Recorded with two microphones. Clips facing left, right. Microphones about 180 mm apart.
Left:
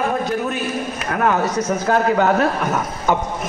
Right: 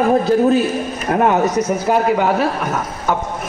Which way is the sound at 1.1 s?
25° right (ahead or behind).